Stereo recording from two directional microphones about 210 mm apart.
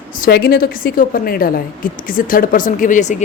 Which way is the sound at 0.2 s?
45° left (ahead or behind).